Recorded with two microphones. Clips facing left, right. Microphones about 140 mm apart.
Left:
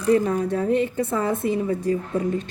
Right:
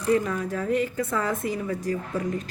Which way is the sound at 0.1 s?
35° left (ahead or behind).